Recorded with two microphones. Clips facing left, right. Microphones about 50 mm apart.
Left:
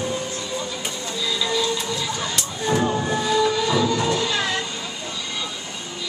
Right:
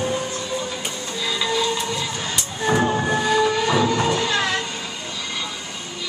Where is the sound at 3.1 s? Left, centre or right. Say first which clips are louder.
Right 1 dB; right.